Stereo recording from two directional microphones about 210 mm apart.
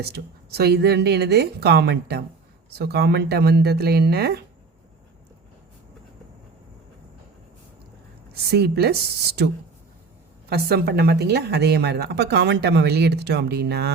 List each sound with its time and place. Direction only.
0.0 s speech: 50° right (ahead or behind)
8.3 s speech: 50° right (ahead or behind)
10.5 s speech: 50° right (ahead or behind)